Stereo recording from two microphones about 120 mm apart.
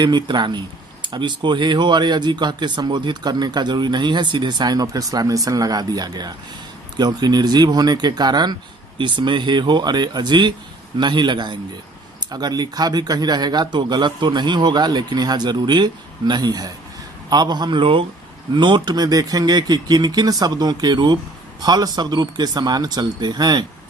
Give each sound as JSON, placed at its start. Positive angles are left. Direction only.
{"t": 0.0, "sound": "speech", "side_deg": -40}